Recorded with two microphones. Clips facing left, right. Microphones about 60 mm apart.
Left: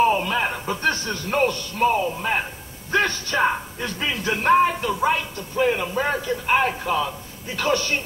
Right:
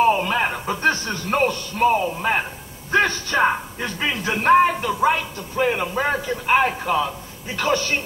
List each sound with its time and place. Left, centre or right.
0.0 s speech: centre